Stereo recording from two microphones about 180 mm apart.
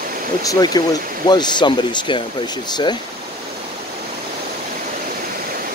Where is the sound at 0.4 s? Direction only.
20° left (ahead or behind).